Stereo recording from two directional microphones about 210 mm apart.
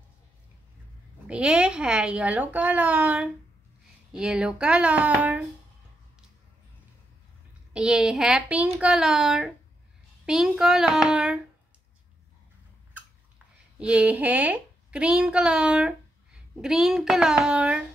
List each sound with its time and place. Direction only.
1.2 s a child's voice: 5° right (ahead or behind)
7.7 s a child's voice: 5° right (ahead or behind)
13.7 s a child's voice: 5° right (ahead or behind)